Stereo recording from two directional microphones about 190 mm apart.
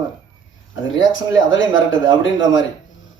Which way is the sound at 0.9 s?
85° left.